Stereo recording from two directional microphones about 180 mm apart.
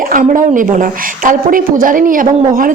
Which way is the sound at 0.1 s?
45° right (ahead or behind).